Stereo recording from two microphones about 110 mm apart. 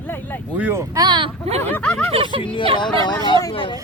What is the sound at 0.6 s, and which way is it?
Speech, 15° right (ahead or behind).